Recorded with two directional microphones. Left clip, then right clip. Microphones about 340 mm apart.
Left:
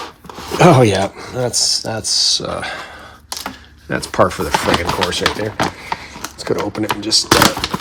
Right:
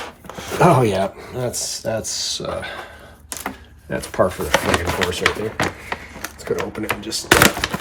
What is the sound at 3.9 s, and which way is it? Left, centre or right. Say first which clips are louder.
Speech: left 4 dB; centre.